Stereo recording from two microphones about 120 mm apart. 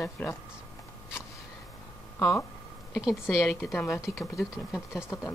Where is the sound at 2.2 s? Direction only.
20° left (ahead or behind).